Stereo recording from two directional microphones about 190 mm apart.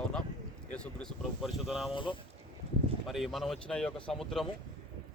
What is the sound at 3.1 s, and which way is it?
Speech, centre (ahead or behind).